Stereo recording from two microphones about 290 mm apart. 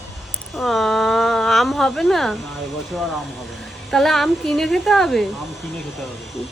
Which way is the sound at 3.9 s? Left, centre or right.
Centre.